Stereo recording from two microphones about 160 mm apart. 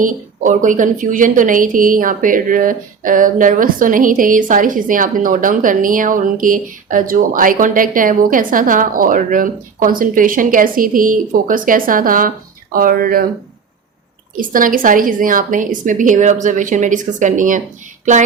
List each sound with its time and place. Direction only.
0.0 s a woman's voice: 55° right (ahead or behind)
14.3 s a woman's voice: 60° right (ahead or behind)
18.0 s a sound: 50° right (ahead or behind)